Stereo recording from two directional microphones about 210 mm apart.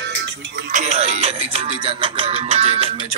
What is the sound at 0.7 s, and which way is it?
Music, 35° right (ahead or behind).